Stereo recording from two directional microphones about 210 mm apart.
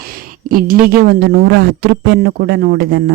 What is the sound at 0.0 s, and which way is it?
Speech, 45° right (ahead or behind).